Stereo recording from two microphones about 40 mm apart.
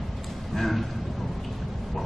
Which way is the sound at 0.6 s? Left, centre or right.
Centre.